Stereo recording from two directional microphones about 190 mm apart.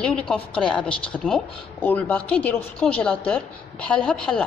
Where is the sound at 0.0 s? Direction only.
5° left (ahead or behind).